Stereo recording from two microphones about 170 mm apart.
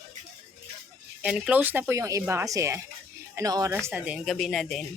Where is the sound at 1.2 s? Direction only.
5° right (ahead or behind).